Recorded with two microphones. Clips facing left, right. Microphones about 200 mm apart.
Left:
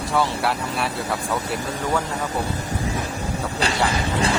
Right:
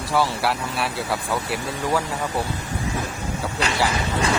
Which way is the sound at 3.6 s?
35° left (ahead or behind).